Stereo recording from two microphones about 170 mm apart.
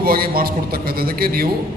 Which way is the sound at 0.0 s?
60° right (ahead or behind).